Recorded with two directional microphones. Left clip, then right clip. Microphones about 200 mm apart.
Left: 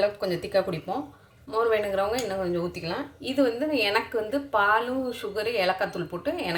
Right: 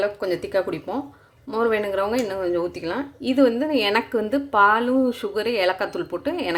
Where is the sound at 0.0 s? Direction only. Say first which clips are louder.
Right 2 dB; 35° right (ahead or behind).